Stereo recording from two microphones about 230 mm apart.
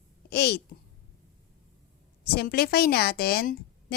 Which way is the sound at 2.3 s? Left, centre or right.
Left.